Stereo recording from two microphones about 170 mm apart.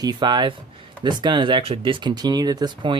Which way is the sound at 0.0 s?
25° right (ahead or behind).